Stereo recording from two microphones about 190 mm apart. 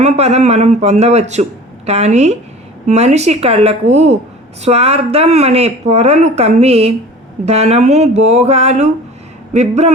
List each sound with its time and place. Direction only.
0.0 s speech: 35° right (ahead or behind)